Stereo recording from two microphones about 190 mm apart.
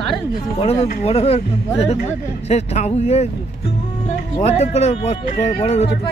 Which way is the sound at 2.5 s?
35° left (ahead or behind).